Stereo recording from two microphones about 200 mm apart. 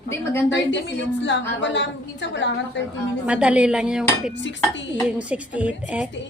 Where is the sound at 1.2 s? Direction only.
60° left (ahead or behind).